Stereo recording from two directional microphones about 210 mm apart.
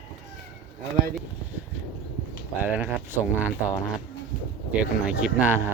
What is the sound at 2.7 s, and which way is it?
Speech, 10° right (ahead or behind).